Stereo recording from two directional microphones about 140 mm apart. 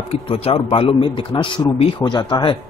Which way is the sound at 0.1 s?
45° left (ahead or behind).